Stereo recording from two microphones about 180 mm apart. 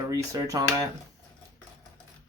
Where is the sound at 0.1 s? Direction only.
20° right (ahead or behind).